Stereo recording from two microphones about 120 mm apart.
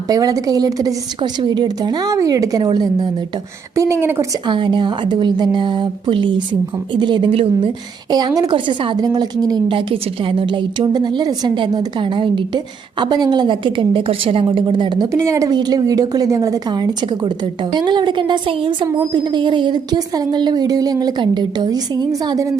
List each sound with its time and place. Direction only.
0.1 s a woman's voice: 30° right (ahead or behind)
3.8 s a woman's voice: 25° right (ahead or behind)
4.4 s a woman's voice: 40° right (ahead or behind)
9.7 s a woman's voice: 45° right (ahead or behind); by 22.5 s 30° right (ahead or behind)